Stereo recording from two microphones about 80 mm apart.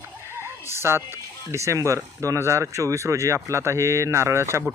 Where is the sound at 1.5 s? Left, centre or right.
Right.